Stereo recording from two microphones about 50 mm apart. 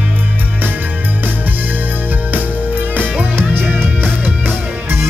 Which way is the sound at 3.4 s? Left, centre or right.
Right.